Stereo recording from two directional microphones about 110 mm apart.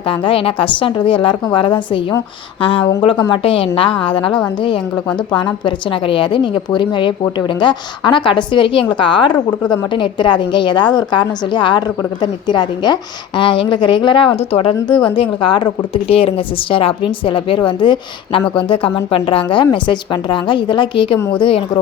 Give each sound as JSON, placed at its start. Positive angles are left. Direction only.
{"t": 0.1, "sound": "a woman's voice", "side_deg": 55}
{"t": 14.8, "sound": "a woman's voice", "side_deg": 45}
{"t": 16.0, "sound": "a woman's voice", "side_deg": 60}